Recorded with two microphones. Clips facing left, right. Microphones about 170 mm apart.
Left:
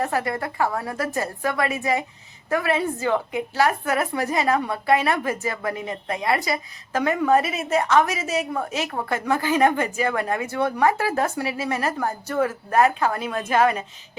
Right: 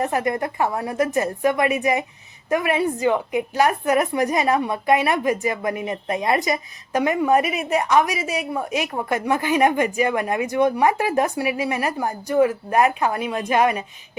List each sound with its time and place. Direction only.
0.0 s a woman's voice: 20° right (ahead or behind)